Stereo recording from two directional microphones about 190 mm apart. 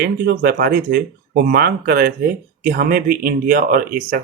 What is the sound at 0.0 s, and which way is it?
Speech, 55° right (ahead or behind).